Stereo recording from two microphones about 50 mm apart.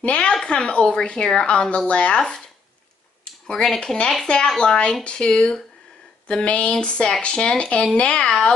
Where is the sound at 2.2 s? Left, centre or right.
Centre.